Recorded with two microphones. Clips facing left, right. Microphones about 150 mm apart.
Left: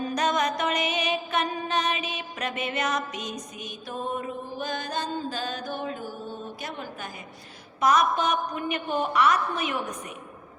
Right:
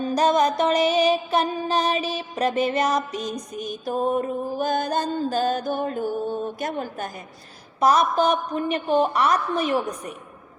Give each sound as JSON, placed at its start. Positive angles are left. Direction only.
{"t": 0.0, "sound": "music", "side_deg": -30}
{"t": 3.5, "sound": "mantra", "side_deg": -40}
{"t": 7.8, "sound": "music", "side_deg": -35}